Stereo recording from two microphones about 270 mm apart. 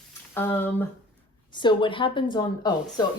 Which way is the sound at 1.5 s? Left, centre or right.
Centre.